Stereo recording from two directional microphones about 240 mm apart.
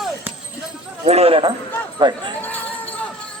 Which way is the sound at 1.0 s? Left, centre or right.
Right.